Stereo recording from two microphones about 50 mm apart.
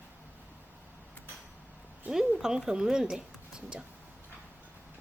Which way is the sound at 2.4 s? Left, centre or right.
Centre.